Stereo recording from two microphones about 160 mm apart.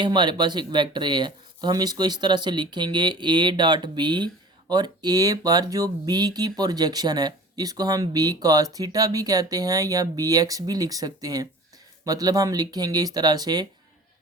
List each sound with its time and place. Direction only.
0.0 s speech: 30° right (ahead or behind)